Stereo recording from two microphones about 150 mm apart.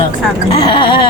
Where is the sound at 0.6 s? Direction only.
35° left (ahead or behind).